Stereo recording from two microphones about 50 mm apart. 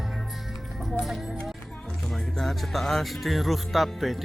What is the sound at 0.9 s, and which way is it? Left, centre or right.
Speech, centre.